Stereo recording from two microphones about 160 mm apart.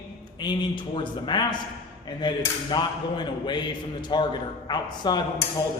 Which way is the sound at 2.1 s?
25° left (ahead or behind).